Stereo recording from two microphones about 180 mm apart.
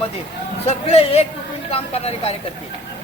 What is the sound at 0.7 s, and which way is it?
Speech, 35° left (ahead or behind).